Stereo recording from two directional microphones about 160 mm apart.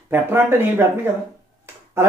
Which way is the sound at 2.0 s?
15° right (ahead or behind).